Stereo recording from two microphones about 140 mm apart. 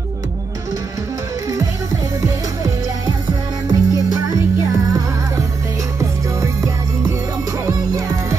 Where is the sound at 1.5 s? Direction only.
25° right (ahead or behind).